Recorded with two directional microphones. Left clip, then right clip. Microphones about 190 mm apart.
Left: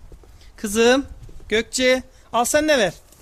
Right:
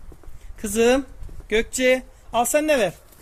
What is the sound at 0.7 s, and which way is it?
Speech, 40° left (ahead or behind).